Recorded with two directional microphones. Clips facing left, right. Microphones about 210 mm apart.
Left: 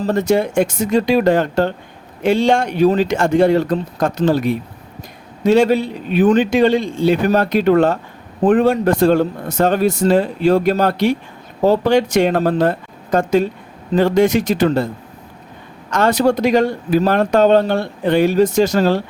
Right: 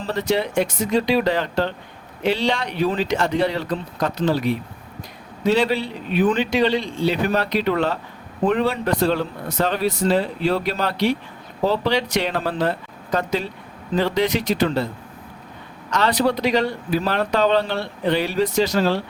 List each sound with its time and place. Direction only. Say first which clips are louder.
0.0 s speech: left 6 dB; 45° left (ahead or behind)
15.9 s speech: left 5 dB; 50° left (ahead or behind)